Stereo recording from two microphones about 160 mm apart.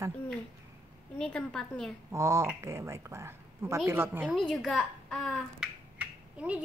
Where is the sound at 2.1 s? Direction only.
20° right (ahead or behind).